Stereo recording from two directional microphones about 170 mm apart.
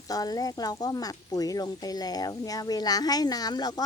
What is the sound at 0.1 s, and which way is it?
Speech, 20° left (ahead or behind).